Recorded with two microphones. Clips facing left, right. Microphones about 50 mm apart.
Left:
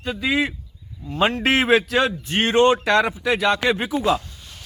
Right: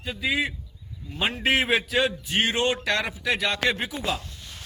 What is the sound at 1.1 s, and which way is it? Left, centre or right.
A man's voice, left.